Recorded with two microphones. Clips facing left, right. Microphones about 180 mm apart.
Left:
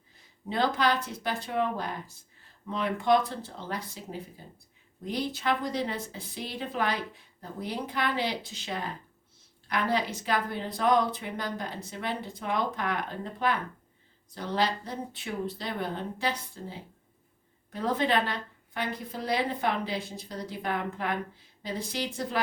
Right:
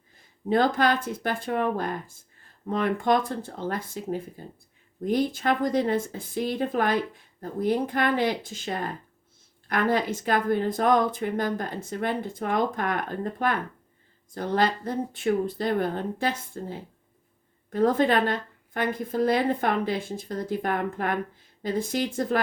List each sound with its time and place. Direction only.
0.4 s speech: 50° right (ahead or behind)